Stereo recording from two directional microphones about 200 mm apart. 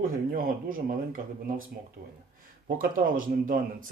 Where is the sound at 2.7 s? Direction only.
45° right (ahead or behind).